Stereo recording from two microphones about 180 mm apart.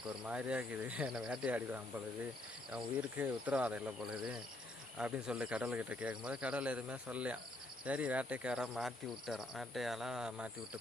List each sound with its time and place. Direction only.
0.3 s speech: 5° right (ahead or behind)